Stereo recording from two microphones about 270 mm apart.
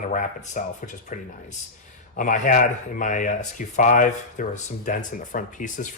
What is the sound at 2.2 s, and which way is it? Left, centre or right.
Speech, left.